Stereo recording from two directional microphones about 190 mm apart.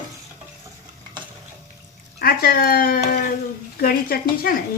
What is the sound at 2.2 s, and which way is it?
Speech, 50° left (ahead or behind).